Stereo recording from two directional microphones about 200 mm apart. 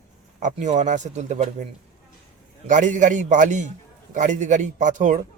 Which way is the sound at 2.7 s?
40° right (ahead or behind).